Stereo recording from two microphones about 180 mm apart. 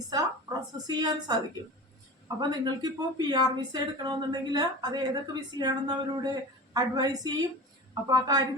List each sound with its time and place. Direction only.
0.1 s a woman's voice: 20° right (ahead or behind)
2.4 s a woman's voice: 25° right (ahead or behind)